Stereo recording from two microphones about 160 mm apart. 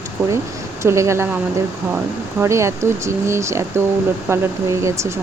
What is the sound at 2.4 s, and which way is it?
Speech, 15° right (ahead or behind).